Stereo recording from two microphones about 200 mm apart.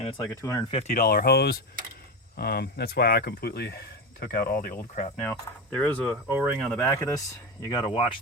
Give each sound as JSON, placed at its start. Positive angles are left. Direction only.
{"t": 0.0, "sound": "speech", "side_deg": 25}
{"t": 0.3, "sound": "speech", "side_deg": 15}
{"t": 0.7, "sound": "speech", "side_deg": 35}
{"t": 5.2, "sound": "speech", "side_deg": 10}
{"t": 6.2, "sound": "speech", "side_deg": -5}
{"t": 6.6, "sound": "speech", "side_deg": 10}